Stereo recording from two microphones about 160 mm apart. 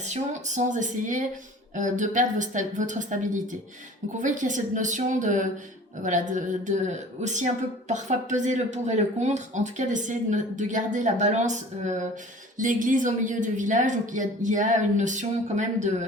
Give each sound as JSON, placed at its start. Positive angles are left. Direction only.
{"t": 0.1, "sound": "speech", "side_deg": -50}